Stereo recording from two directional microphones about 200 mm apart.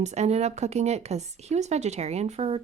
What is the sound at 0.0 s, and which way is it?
Speech, 35° right (ahead or behind).